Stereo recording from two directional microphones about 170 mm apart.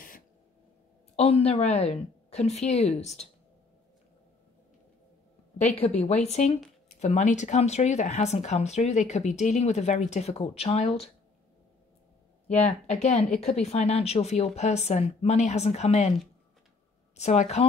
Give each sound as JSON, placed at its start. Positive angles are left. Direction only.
{"t": 1.1, "sound": "speech", "side_deg": 35}
{"t": 5.8, "sound": "speech", "side_deg": 40}
{"t": 12.5, "sound": "a woman's voice", "side_deg": 40}